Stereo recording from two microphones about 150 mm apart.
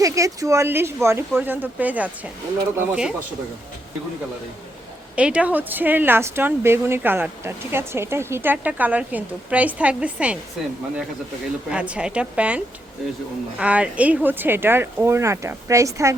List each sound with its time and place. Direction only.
0.0 s speech: 20° right (ahead or behind); by 3.2 s 5° right (ahead or behind)
5.1 s speech: 10° right (ahead or behind)
11.7 s speech: 5° right (ahead or behind)